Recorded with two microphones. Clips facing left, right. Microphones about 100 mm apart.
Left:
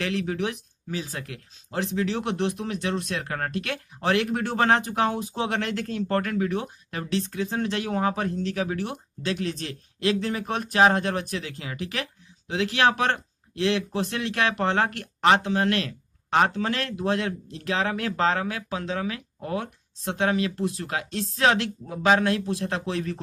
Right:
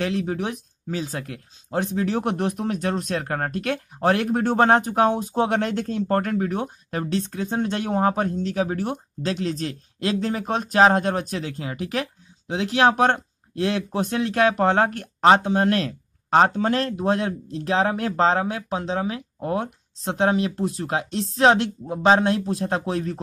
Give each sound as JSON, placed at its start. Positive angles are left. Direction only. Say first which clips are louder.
{"t": 0.0, "sound": "speech", "louder": "right 2 dB", "side_deg": -30}